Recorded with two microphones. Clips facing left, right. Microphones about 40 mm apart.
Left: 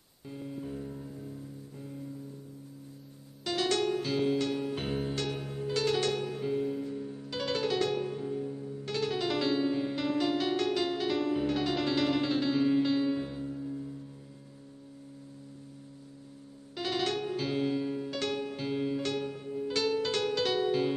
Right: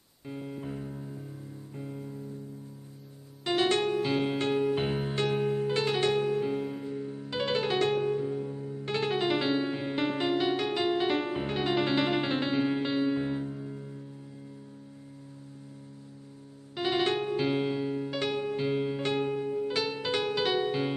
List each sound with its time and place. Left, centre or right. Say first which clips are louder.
0.3 s music: right 2 dB; right
3.4 s music: right 3 dB; right
4.6 s music: right 4 dB; right
8.1 s music: right 6 dB; centre
8.4 s music: right 1 dB; right
10.3 s music: right 1 dB; centre
16.7 s music: right 4 dB; right
19.7 s music: left 1 dB; centre